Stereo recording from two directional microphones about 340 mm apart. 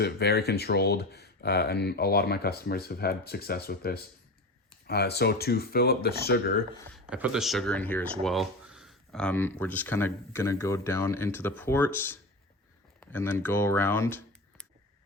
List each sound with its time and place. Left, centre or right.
0.0 s speech: left
6.9 s speech: centre